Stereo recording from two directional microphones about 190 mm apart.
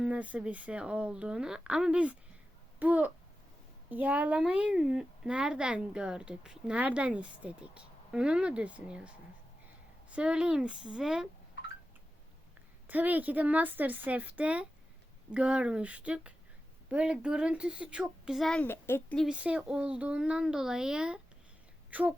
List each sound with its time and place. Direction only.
0.0 s a woman's voice: 5° right (ahead or behind)
12.9 s a woman's voice: 10° right (ahead or behind)
21.8 s a sound: 10° right (ahead or behind)